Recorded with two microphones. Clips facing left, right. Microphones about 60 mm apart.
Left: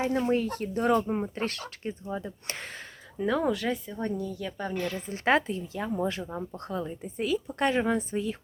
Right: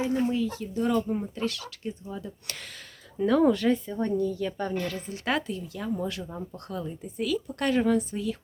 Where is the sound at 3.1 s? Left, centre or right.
Centre.